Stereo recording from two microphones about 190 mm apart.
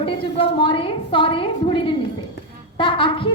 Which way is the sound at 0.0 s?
25° left (ahead or behind).